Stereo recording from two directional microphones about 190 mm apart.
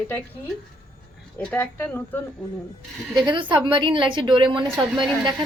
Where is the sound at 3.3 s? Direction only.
25° right (ahead or behind).